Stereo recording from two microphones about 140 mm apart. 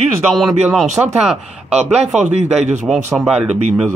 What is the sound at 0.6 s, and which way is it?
Speech, 5° right (ahead or behind).